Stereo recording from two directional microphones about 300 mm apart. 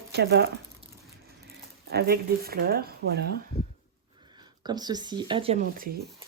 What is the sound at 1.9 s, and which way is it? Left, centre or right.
Speech, right.